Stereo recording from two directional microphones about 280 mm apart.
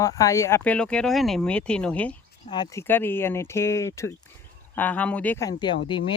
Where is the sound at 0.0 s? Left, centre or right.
Centre.